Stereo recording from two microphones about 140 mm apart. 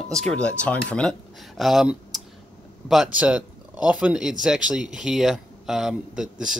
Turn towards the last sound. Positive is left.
turn(degrees=-5)  # may be behind; listen again after turning